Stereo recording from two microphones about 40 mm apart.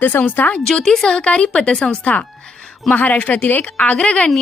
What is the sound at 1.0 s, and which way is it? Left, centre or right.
A woman's voice, left.